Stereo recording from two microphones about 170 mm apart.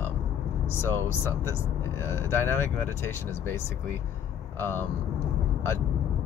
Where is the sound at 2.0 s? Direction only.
15° left (ahead or behind).